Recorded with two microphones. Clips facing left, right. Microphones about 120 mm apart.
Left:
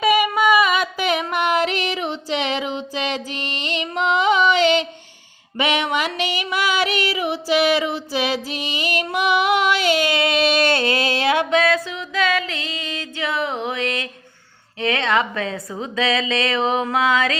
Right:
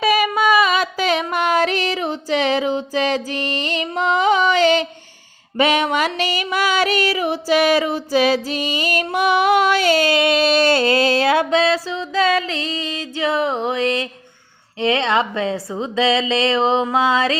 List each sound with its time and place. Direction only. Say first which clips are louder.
0.0 s a sound: even; 15° left (ahead or behind)
0.5 s a sound: right 1 dB; 30° right (ahead or behind)
5.5 s music: right 4 dB; 40° right (ahead or behind)
9.1 s female singing: right 3 dB; 40° right (ahead or behind)
10.3 s music: right 3 dB; 30° right (ahead or behind)
14.8 s a woman's voice: right 2 dB; 30° right (ahead or behind)
16.9 s music: right 2 dB; 30° right (ahead or behind)